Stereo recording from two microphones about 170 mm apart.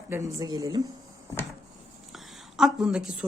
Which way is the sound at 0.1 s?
20° right (ahead or behind).